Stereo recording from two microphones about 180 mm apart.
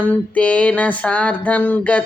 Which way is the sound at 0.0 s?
10° left (ahead or behind).